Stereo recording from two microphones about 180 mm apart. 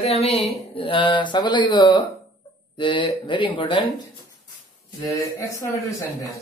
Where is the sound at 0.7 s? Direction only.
30° left (ahead or behind).